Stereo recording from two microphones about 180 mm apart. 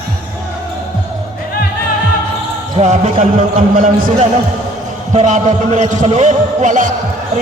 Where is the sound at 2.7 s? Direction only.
35° right (ahead or behind).